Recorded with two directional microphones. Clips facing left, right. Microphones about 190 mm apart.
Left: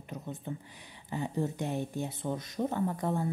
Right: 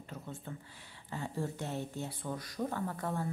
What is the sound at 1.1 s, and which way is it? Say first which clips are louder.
Speech: left 5 dB; 15° left (ahead or behind).